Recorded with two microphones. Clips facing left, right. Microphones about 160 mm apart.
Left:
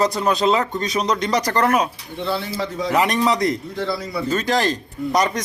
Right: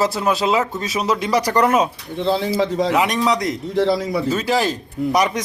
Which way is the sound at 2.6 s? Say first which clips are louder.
Right 6 dB; 90° right.